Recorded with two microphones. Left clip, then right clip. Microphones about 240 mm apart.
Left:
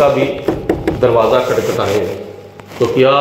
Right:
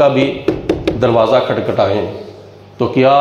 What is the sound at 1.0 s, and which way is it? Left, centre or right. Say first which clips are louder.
Speech: even; right.